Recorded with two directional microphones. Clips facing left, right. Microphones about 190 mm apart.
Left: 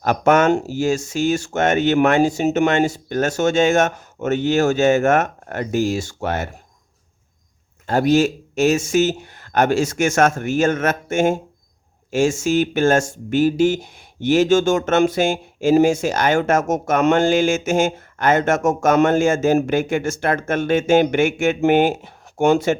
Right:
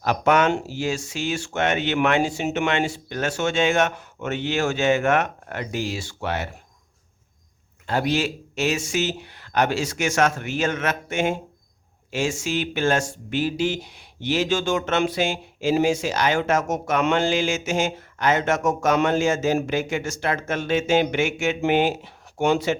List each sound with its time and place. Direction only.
0.0 s speech: 45° left (ahead or behind)
7.9 s speech: 45° left (ahead or behind)